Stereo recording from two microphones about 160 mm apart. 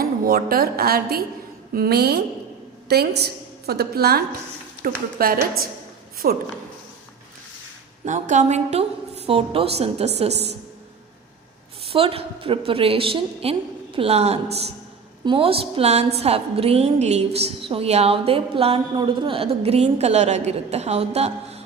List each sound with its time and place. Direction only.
0.0 s a woman's voice: 70° right (ahead or behind)
4.8 s a woman's voice: 65° right (ahead or behind)
8.0 s a woman's voice: 50° right (ahead or behind)
11.9 s a woman's voice: 35° right (ahead or behind)